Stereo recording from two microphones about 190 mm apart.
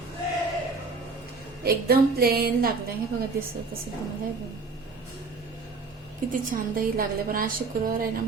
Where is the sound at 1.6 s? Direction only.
55° right (ahead or behind).